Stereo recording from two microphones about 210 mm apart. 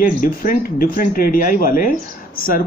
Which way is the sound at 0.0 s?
40° left (ahead or behind).